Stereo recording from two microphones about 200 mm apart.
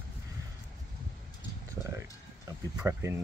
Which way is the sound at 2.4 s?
15° right (ahead or behind).